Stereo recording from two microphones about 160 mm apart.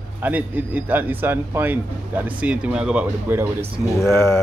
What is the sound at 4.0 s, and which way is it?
Speech, 15° left (ahead or behind).